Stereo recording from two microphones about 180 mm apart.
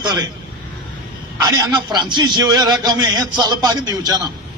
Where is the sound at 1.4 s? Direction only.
25° right (ahead or behind).